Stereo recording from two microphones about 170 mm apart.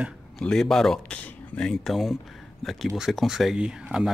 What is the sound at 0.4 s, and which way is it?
Speech, 5° left (ahead or behind).